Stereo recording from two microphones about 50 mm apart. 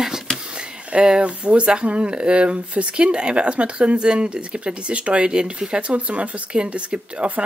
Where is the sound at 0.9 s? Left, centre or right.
Right.